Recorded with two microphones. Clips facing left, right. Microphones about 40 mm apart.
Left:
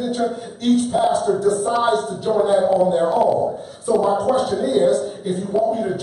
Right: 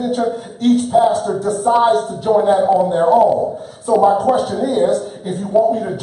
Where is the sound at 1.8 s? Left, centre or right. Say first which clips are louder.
Right 4 dB; centre.